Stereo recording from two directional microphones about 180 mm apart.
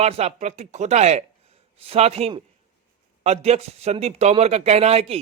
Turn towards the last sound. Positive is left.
turn(degrees=-35)  # may be behind; listen again after turning